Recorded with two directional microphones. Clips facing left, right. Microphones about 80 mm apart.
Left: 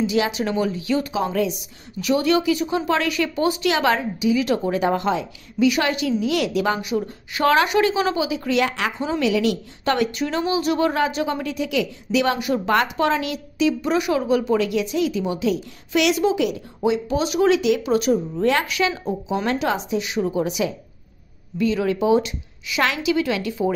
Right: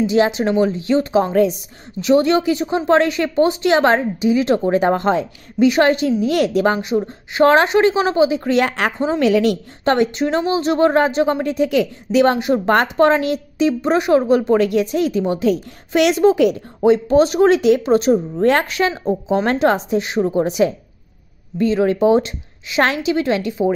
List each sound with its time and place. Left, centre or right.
0.0 s a woman's voice: right